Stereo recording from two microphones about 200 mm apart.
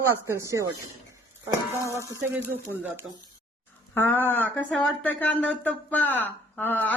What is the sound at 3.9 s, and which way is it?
Speech, 10° left (ahead or behind).